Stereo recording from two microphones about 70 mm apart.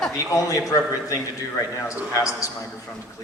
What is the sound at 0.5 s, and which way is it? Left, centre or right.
Speech, left.